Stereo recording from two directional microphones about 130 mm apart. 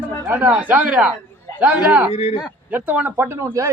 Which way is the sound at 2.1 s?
50° left (ahead or behind).